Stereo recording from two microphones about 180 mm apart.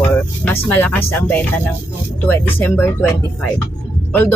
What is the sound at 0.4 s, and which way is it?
Speech, 10° left (ahead or behind).